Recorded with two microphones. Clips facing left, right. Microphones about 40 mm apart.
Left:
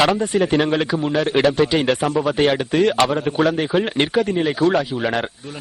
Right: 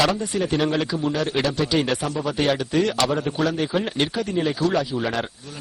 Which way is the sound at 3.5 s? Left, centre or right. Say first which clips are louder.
Left 5 dB; centre.